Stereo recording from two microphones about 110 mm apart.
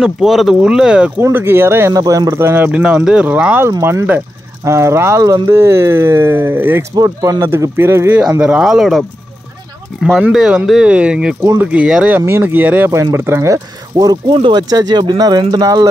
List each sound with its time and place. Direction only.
0.0 s speech: 5° right (ahead or behind)
1.2 s speech: 20° right (ahead or behind)
7.0 s speech: 30° right (ahead or behind)
8.4 s speech: 5° right (ahead or behind)
10.3 s speech: 10° right (ahead or behind); by 14.1 s 30° right (ahead or behind)
14.3 s speech: 50° right (ahead or behind)
14.7 s speech: 35° right (ahead or behind)